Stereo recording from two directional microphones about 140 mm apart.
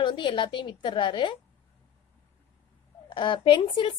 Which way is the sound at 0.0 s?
35° left (ahead or behind).